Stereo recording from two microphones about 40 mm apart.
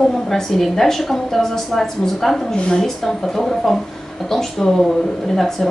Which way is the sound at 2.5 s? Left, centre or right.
Left.